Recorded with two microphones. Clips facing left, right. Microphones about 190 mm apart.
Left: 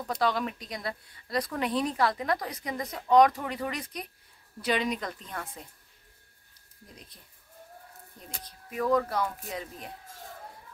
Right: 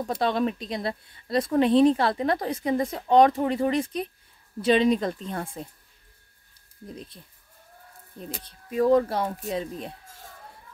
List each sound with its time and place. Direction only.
0.0 s speech: 25° right (ahead or behind)
8.2 s speech: 30° right (ahead or behind)